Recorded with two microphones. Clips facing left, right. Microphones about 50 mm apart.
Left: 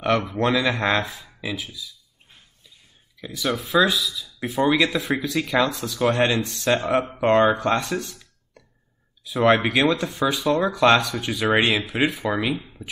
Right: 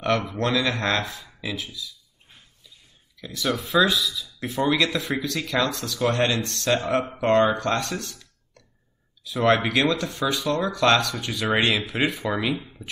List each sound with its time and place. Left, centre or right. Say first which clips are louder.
0.0 s speech: left 2 dB; centre
3.3 s speech: left 1 dB; centre